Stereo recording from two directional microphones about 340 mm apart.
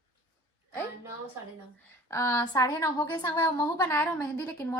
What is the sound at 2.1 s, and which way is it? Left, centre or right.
A woman's voice, centre.